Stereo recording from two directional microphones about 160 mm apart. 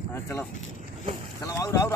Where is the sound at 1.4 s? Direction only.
20° left (ahead or behind).